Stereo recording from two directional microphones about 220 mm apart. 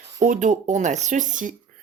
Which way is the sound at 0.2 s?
35° right (ahead or behind).